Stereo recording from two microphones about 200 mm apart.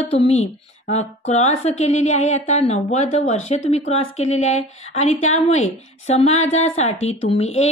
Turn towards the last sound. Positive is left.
turn(degrees=30)  # may be behind; listen again after turning